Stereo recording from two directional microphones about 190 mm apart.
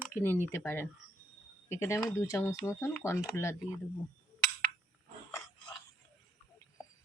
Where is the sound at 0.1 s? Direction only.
10° left (ahead or behind).